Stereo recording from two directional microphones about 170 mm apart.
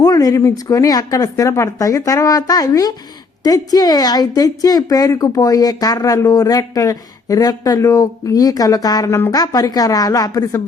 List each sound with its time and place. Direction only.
0.0 s a woman's voice: 20° left (ahead or behind)